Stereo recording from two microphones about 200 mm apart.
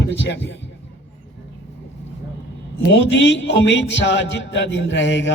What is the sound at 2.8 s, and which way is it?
Speech, 65° left (ahead or behind).